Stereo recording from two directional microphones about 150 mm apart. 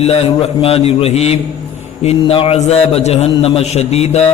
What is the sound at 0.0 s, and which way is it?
A man's voice, 45° left (ahead or behind).